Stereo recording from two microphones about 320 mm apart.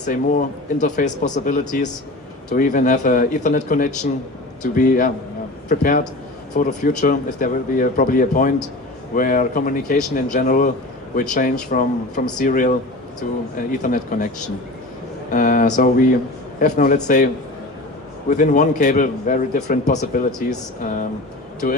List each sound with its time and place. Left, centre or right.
0.1 s speech: left
15.3 s speech: left
18.3 s speech: left
21.6 s speech: left